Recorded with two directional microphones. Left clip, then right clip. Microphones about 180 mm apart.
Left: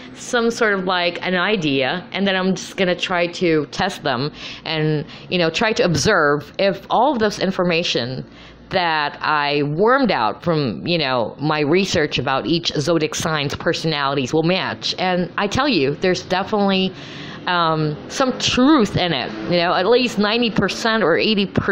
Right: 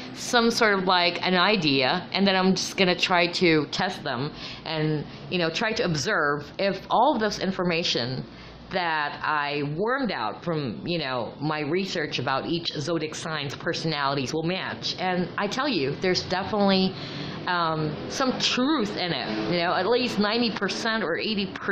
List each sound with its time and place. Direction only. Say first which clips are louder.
0.3 s a woman's voice: left 3 dB; 10° left (ahead or behind)
3.8 s speech: left 7 dB; 30° left (ahead or behind)
4.2 s speech: left 7 dB; 20° left (ahead or behind); by 21.6 s 35° left (ahead or behind)